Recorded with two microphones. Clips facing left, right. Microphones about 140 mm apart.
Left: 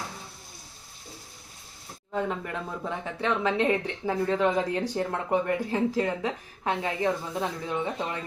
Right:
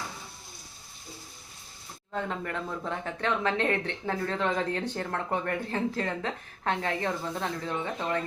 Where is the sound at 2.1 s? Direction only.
10° left (ahead or behind).